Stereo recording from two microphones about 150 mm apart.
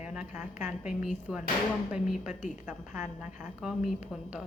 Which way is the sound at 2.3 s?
55° left (ahead or behind).